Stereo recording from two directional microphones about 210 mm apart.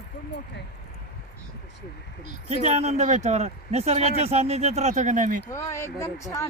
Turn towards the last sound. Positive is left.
turn(degrees=15)  # may be behind; listen again after turning